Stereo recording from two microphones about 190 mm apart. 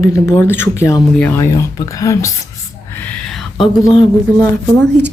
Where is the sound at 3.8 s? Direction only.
25° left (ahead or behind).